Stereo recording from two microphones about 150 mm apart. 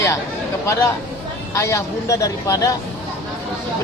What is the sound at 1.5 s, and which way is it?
Speech, 20° left (ahead or behind).